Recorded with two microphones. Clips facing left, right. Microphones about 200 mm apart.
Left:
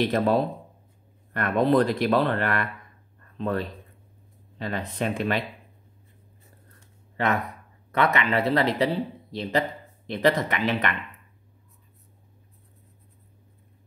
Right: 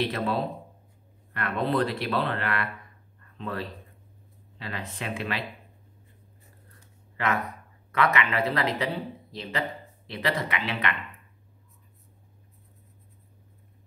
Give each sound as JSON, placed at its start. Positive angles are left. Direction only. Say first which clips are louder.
{"t": 0.0, "sound": "speech", "louder": "left 5 dB", "side_deg": 40}
{"t": 7.9, "sound": "speech", "louder": "left 2 dB", "side_deg": 35}